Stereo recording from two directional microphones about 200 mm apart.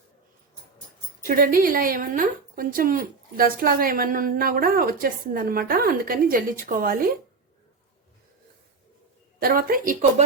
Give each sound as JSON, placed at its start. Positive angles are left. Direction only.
{"t": 1.2, "sound": "a woman's voice", "side_deg": -45}
{"t": 9.4, "sound": "a woman's voice", "side_deg": -45}